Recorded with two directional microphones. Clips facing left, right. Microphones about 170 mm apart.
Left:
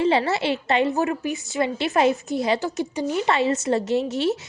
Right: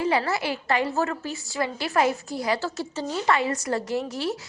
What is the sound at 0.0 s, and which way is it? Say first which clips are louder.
A woman's voice: left 4 dB; 25° left (ahead or behind).